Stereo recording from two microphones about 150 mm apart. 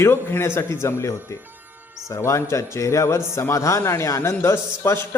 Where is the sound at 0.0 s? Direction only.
15° left (ahead or behind).